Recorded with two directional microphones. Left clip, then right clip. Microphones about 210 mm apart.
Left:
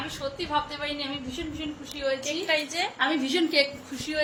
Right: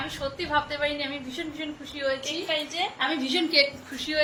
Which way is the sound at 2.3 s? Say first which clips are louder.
Left 2 dB; 30° left (ahead or behind).